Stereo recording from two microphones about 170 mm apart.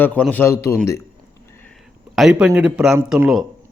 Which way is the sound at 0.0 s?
10° left (ahead or behind).